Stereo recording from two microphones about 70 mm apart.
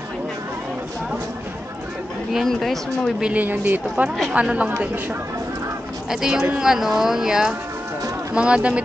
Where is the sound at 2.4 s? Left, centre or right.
Centre.